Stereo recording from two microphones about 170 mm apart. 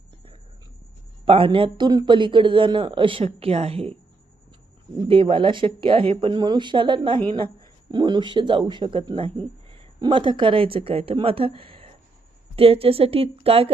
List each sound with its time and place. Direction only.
1.2 s speech: 30° right (ahead or behind)
5.0 s a woman's voice: 30° right (ahead or behind)